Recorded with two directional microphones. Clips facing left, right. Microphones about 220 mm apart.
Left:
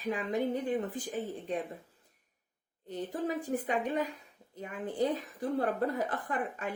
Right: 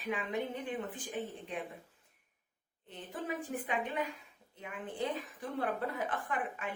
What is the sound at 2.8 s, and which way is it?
Speech, 40° left (ahead or behind).